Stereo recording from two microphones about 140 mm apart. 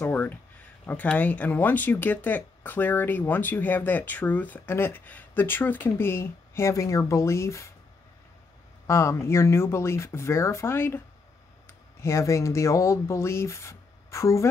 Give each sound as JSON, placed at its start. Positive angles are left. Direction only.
{"t": 0.0, "sound": "speech", "side_deg": 15}
{"t": 8.8, "sound": "speech", "side_deg": 20}
{"t": 12.0, "sound": "speech", "side_deg": 20}